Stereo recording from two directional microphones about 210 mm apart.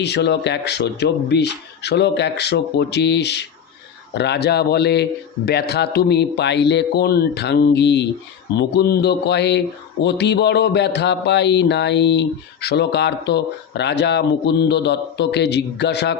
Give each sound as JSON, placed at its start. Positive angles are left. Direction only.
{"t": 0.0, "sound": "speech", "side_deg": 55}